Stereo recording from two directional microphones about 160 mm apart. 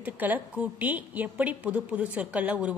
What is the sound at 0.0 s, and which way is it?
A woman's voice, 10° right (ahead or behind).